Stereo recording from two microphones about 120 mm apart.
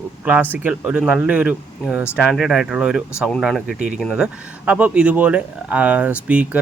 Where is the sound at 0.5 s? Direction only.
10° right (ahead or behind).